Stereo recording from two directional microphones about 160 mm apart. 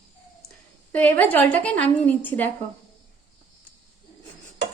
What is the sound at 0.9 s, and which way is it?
A woman's voice, 10° left (ahead or behind).